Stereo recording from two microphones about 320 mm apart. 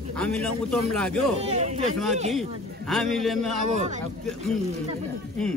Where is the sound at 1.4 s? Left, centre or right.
Centre.